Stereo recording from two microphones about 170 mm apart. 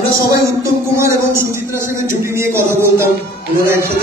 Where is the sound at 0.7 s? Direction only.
15° right (ahead or behind).